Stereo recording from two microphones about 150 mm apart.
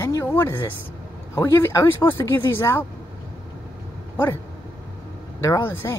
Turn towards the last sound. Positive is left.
turn(degrees=15)  # may be behind; listen again after turning